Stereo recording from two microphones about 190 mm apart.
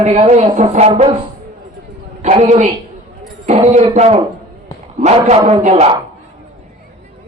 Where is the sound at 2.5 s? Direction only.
35° right (ahead or behind).